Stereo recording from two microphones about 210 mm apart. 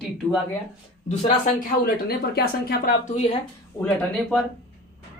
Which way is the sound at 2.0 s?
50° left (ahead or behind).